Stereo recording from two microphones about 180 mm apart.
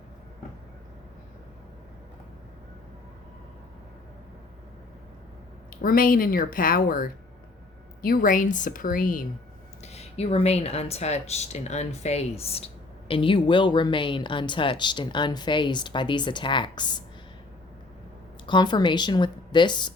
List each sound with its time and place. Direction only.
5.7 s speech: 50° left (ahead or behind)
9.8 s speech: 35° left (ahead or behind)
18.4 s speech: 25° left (ahead or behind)